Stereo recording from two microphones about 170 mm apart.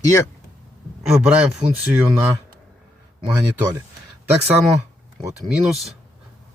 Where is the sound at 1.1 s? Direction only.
5° right (ahead or behind).